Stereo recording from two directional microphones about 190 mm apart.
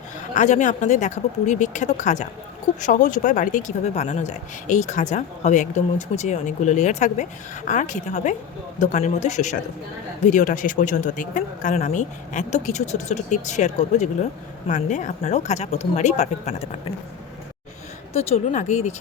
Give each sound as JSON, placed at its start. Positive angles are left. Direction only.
{"t": 0.3, "sound": "speech", "side_deg": 40}
{"t": 18.1, "sound": "speech", "side_deg": 35}